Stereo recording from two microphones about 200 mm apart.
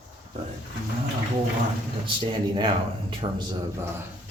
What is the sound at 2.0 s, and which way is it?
Speech, 25° right (ahead or behind).